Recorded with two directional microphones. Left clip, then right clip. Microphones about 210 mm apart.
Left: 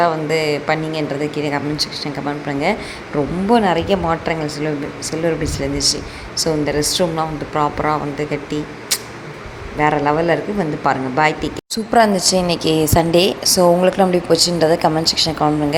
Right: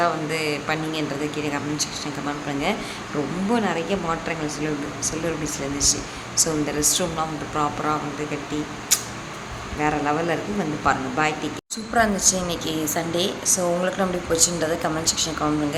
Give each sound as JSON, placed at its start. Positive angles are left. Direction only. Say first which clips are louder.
{"t": 0.0, "sound": "speech", "louder": "left 6 dB", "side_deg": 20}
{"t": 9.8, "sound": "speech", "louder": "left 7 dB", "side_deg": 20}